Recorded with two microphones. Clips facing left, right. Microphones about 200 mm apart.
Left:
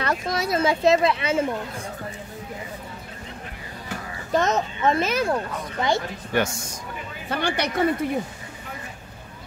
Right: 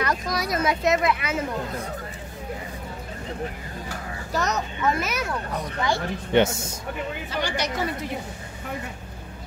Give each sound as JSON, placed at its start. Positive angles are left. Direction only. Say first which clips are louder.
{"t": 0.0, "sound": "speech", "louder": "left 1 dB", "side_deg": 25}
{"t": 4.3, "sound": "speech", "louder": "left 5 dB", "side_deg": 25}
{"t": 6.3, "sound": "a man's voice", "louder": "right 4 dB", "side_deg": -25}
{"t": 7.2, "sound": "a woman's voice", "louder": "left 5 dB", "side_deg": 55}